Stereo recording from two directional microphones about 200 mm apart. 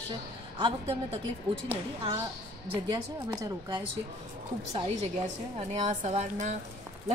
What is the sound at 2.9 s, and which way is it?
Speech, 20° right (ahead or behind).